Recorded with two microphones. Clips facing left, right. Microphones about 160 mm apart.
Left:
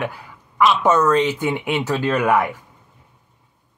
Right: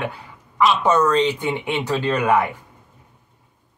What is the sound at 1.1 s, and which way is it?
Speech, 10° left (ahead or behind).